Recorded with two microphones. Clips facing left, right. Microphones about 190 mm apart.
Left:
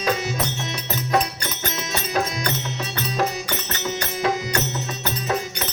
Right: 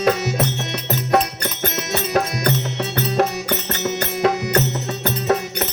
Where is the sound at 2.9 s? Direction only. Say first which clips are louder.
Right 5 dB; 60° right (ahead or behind).